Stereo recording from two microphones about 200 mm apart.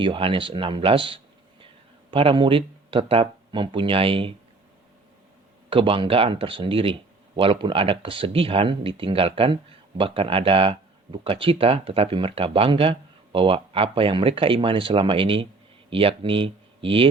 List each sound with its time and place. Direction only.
0.0 s speech: 25° right (ahead or behind)
5.7 s speech: 25° right (ahead or behind)